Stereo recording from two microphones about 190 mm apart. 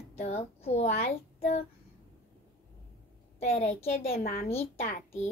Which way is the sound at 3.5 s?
35° left (ahead or behind).